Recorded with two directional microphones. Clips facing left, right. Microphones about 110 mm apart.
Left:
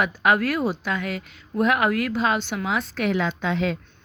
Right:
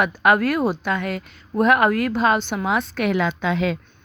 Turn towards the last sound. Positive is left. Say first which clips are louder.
# right 2 dB
turn(degrees=-90)